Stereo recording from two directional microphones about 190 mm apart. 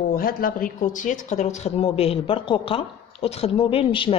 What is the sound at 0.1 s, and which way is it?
Speech, 50° left (ahead or behind).